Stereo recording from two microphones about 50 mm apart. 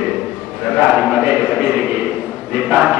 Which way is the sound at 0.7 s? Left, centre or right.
Centre.